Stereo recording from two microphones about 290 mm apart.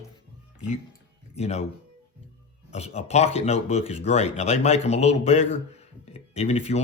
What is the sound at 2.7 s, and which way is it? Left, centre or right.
Speech, left.